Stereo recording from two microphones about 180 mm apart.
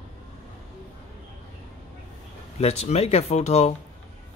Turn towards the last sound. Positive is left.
turn(degrees=35)  # may be behind; listen again after turning